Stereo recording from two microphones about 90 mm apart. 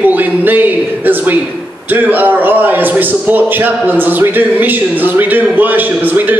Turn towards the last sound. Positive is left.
turn(degrees=-20)  # may be behind; listen again after turning